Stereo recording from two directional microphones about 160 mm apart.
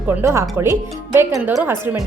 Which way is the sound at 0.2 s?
15° right (ahead or behind).